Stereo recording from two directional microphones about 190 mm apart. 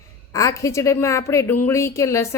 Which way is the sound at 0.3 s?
15° left (ahead or behind).